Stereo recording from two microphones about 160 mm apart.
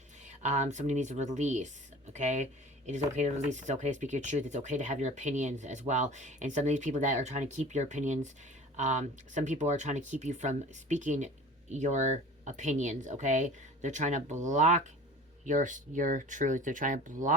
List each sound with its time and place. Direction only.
0.4 s speech: 45° right (ahead or behind)